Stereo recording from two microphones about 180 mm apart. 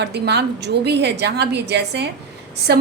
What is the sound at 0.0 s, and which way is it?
A woman's voice, 65° right (ahead or behind).